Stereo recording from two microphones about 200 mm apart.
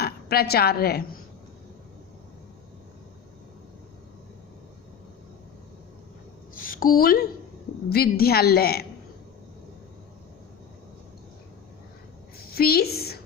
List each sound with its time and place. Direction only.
0.0 s a woman's voice: 50° left (ahead or behind)
6.6 s a sound: 45° left (ahead or behind)
7.9 s a woman's voice: 50° left (ahead or behind)
12.5 s a woman's voice: 50° left (ahead or behind)